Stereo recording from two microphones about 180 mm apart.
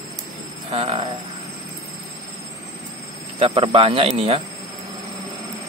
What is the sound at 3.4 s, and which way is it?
Speech, 30° right (ahead or behind).